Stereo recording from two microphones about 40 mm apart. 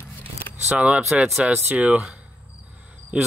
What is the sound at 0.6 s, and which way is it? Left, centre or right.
Speech, right.